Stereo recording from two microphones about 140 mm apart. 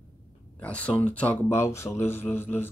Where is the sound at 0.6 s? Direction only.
10° left (ahead or behind).